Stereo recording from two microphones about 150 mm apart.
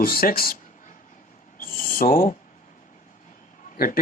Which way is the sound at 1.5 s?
75° left (ahead or behind).